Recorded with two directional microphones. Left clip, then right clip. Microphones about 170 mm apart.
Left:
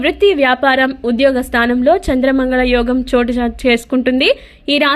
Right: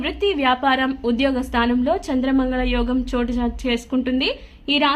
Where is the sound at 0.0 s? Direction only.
30° left (ahead or behind).